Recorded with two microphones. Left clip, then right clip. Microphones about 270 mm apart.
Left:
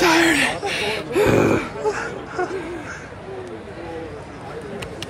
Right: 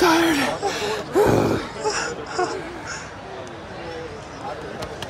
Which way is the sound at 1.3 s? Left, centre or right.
Centre.